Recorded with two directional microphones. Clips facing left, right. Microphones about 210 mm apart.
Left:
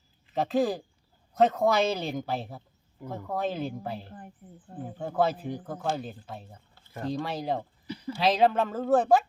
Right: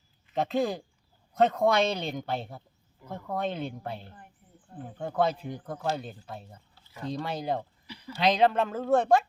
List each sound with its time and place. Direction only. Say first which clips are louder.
0.3 s speech: left 2 dB; centre (ahead or behind)
4.4 s speech: left 10 dB; 50° left (ahead or behind)
4.9 s speech: left 1 dB; 5° left (ahead or behind)